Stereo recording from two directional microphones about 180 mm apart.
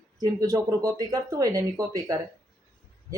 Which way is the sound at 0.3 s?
20° right (ahead or behind).